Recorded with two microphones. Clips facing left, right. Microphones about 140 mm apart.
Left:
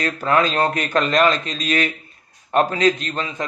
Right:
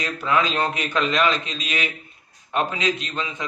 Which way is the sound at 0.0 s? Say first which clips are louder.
Left 4 dB; 40° left (ahead or behind).